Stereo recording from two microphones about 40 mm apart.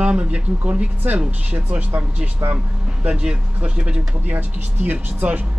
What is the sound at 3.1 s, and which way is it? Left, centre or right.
Speech, right.